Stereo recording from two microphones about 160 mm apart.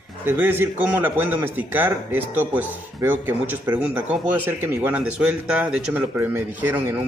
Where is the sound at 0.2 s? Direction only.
10° right (ahead or behind).